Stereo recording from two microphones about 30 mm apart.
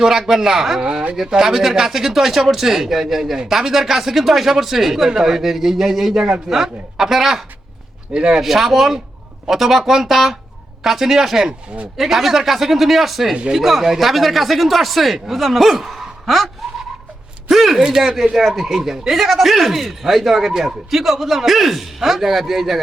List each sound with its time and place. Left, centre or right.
0.0 s a man's voice: centre
0.8 s speech: right
1.3 s a man's voice: centre
8.1 s speech: right
8.4 s a man's voice: centre
15.9 s a sound: centre
17.5 s a man's voice: centre